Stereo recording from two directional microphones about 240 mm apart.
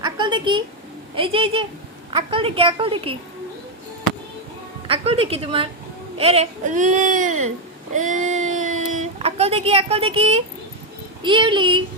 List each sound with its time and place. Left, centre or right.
0.0 s a sound: centre
1.1 s a woman's voice: right
4.9 s a woman's voice: right